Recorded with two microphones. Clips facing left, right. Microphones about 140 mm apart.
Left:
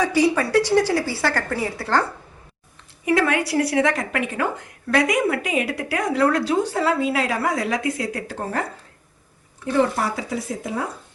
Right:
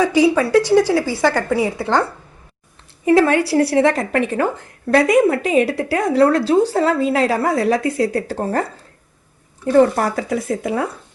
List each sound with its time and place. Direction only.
0.0 s speech: 10° right (ahead or behind)
1.5 s a woman's voice: 5° right (ahead or behind)
3.1 s a woman's voice: 30° right (ahead or behind)
9.6 s speech: 45° right (ahead or behind); by 10.8 s 65° right (ahead or behind)